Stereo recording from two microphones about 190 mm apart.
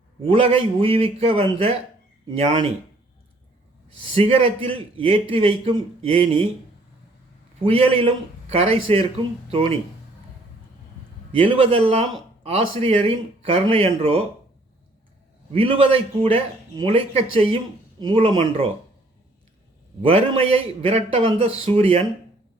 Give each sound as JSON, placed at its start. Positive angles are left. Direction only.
{"t": 0.3, "sound": "a man's voice", "side_deg": -30}
{"t": 4.0, "sound": "a man's voice", "side_deg": -30}
{"t": 7.6, "sound": "a man's voice", "side_deg": -30}
{"t": 11.3, "sound": "speech", "side_deg": -30}
{"t": 15.5, "sound": "a man's voice", "side_deg": -30}
{"t": 20.0, "sound": "speech", "side_deg": -30}